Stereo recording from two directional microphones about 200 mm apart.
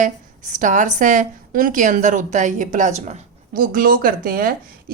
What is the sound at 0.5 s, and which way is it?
A woman's voice, 40° right (ahead or behind).